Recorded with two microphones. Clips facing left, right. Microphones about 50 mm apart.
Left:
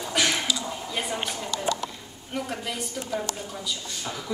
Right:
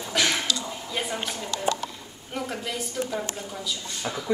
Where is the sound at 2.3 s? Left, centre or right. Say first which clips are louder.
Even; centre.